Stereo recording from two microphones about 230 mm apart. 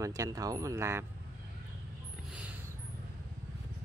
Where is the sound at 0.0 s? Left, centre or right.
Centre.